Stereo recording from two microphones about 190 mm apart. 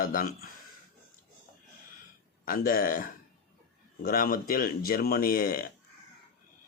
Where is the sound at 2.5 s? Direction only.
45° left (ahead or behind).